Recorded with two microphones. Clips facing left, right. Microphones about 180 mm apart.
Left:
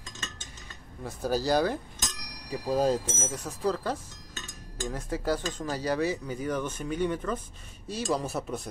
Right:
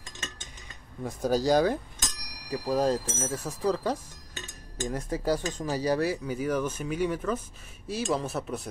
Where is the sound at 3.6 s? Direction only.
10° right (ahead or behind).